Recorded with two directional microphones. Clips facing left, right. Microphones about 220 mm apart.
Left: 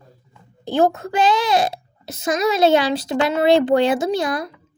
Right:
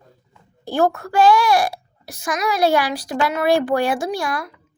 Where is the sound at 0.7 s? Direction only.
20° left (ahead or behind).